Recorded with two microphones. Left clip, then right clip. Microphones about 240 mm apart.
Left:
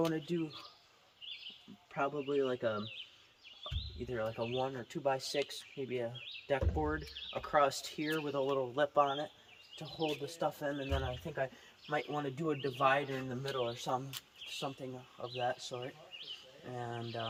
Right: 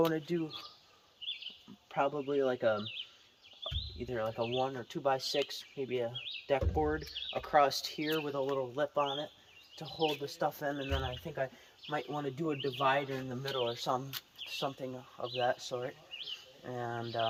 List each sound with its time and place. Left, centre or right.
0.0 s speech: centre
1.9 s speech: centre
3.6 s a sound: centre
4.6 s speech: centre
9.7 s speech: centre
13.4 s speech: centre